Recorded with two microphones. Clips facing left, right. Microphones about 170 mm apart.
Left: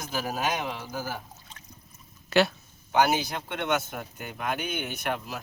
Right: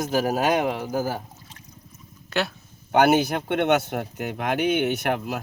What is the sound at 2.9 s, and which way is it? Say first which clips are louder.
Speech: right 6 dB; 60° right (ahead or behind).